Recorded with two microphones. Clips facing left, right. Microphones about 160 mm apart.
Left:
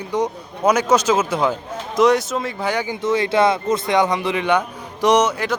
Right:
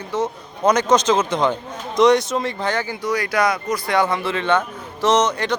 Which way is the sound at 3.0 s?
25° left (ahead or behind).